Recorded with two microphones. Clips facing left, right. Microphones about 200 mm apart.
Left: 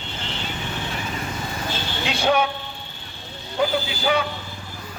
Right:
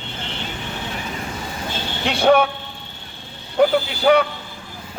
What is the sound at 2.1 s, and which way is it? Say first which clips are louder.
Speech: right 6 dB; 60° right (ahead or behind).